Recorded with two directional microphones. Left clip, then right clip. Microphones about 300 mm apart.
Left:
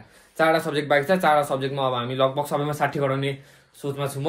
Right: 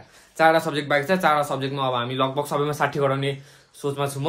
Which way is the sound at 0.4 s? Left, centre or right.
Centre.